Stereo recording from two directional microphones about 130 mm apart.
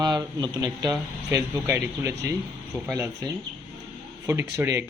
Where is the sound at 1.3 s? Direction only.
20° right (ahead or behind).